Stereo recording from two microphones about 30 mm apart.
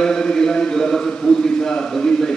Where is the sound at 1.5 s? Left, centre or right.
Left.